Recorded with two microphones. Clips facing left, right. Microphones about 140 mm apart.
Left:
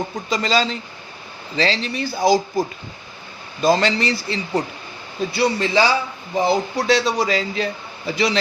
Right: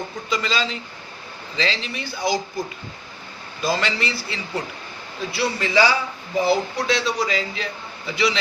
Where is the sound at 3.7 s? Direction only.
35° left (ahead or behind).